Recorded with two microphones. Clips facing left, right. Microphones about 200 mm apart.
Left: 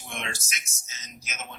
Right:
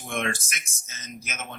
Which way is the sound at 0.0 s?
50° right (ahead or behind).